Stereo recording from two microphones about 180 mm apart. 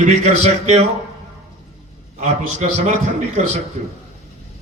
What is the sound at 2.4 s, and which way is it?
A man's voice, 40° right (ahead or behind).